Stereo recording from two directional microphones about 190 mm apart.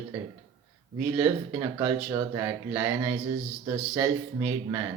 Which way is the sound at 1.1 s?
15° right (ahead or behind).